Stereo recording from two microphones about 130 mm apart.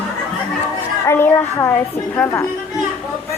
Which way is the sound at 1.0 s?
20° left (ahead or behind).